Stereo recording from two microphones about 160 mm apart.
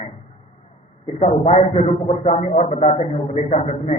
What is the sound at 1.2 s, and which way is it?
A man's voice, 40° left (ahead or behind).